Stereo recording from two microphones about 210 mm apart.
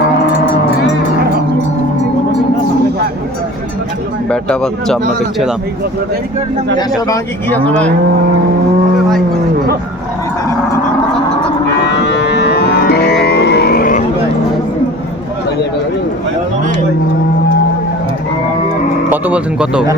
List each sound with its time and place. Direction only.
4.3 s speech: 5° left (ahead or behind)
7.1 s speech: 10° left (ahead or behind)
11.9 s music: 55° left (ahead or behind)
13.2 s a sound: 50° left (ahead or behind)
19.1 s speech: 5° right (ahead or behind)